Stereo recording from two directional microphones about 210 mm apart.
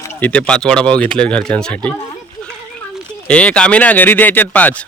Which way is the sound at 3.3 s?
5° left (ahead or behind).